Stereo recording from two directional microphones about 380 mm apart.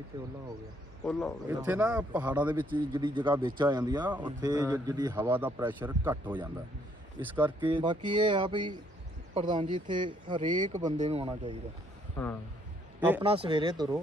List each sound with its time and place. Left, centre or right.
1.5 s a man's voice: centre
12.2 s speech: centre
13.0 s a man's voice: centre